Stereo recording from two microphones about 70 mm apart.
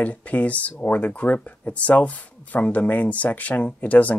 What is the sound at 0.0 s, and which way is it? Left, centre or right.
Speech, left.